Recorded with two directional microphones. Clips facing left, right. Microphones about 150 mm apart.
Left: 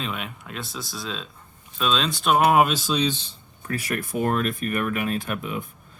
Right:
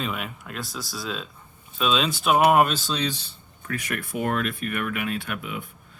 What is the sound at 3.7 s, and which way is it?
Speech, 35° left (ahead or behind).